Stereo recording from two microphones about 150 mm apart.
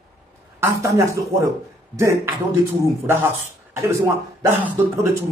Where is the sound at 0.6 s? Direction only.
20° right (ahead or behind).